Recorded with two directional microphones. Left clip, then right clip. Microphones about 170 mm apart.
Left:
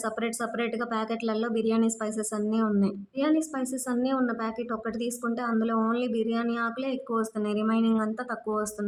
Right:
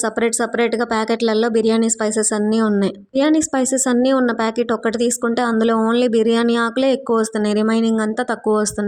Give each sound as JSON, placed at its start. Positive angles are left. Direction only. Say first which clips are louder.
{"t": 0.0, "sound": "speech", "louder": "right 12 dB", "side_deg": -40}